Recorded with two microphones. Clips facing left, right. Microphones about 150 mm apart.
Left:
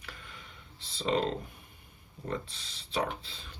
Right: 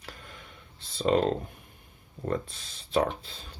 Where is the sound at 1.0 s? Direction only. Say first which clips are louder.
Right 5 dB; 50° right (ahead or behind).